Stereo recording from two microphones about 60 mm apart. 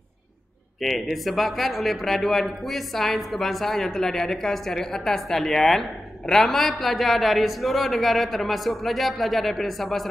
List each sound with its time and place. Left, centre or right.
0.7 s a man's voice: centre